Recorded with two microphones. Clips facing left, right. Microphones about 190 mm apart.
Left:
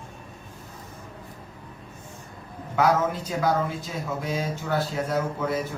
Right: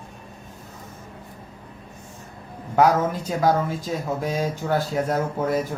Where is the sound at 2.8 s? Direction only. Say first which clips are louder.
Right 3 dB; 45° right (ahead or behind).